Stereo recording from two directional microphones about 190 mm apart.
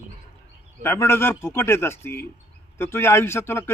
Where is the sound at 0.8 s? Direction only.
10° left (ahead or behind).